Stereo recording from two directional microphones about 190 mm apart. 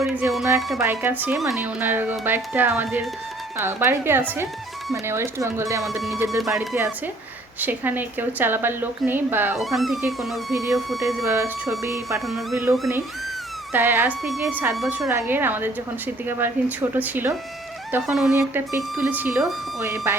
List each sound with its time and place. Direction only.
0.0 s music: 5° right (ahead or behind)
0.8 s speech: 10° right (ahead or behind)
5.8 s speech: centre (ahead or behind)
6.5 s speech: 15° right (ahead or behind)
9.6 s speech: centre (ahead or behind)
10.5 s speech: 15° right (ahead or behind)
13.7 s speech: 10° right (ahead or behind)
18.3 s speech: 10° right (ahead or behind)